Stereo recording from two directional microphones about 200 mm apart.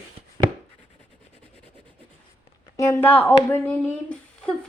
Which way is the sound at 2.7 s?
15° left (ahead or behind).